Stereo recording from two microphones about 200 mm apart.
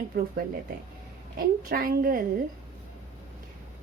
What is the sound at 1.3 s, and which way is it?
Speech, 45° right (ahead or behind).